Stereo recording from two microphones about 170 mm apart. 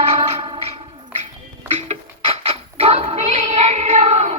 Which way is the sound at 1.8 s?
40° right (ahead or behind).